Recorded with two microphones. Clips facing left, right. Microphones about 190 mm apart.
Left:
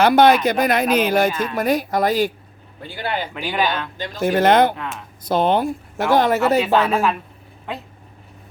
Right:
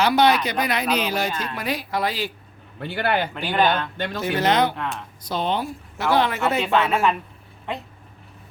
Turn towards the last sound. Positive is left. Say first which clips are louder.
# even
turn(degrees=0)  # may be behind; listen again after turning